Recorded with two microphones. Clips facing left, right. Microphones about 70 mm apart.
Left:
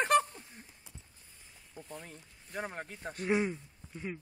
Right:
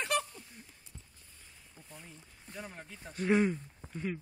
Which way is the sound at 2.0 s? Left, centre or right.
Left.